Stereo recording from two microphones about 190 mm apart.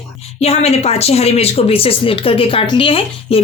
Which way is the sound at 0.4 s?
35° left (ahead or behind).